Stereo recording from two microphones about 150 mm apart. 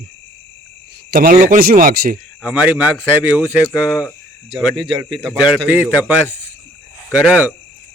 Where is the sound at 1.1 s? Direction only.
70° right (ahead or behind).